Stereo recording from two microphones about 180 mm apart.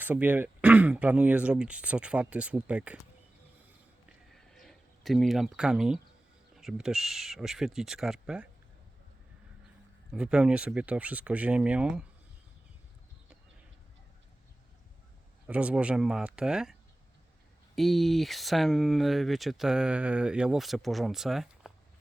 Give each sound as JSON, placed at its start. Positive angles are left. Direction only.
{"t": 0.0, "sound": "speech", "side_deg": -10}
{"t": 4.3, "sound": "a sound", "side_deg": 0}
{"t": 6.6, "sound": "speech", "side_deg": 0}
{"t": 10.1, "sound": "speech", "side_deg": -5}
{"t": 15.4, "sound": "speech", "side_deg": -5}
{"t": 17.7, "sound": "speech", "side_deg": 0}